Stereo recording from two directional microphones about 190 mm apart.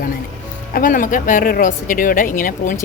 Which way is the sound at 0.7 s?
45° left (ahead or behind).